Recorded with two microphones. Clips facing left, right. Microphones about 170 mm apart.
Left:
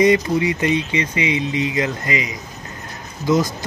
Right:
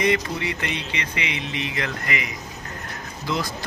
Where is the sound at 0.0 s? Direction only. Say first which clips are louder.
Left 8 dB; 20° left (ahead or behind).